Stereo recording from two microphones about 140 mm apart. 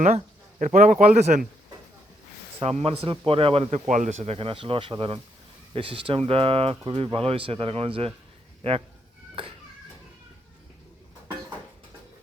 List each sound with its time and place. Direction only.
0.6 s speech: 65° right (ahead or behind)
2.6 s speech: 45° right (ahead or behind)
3.8 s speech: 60° right (ahead or behind); by 8.8 s 40° right (ahead or behind)